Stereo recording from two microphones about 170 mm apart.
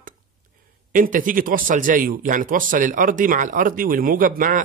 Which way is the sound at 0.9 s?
50° right (ahead or behind).